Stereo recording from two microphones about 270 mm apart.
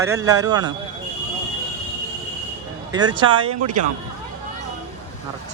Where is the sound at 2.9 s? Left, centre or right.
Centre.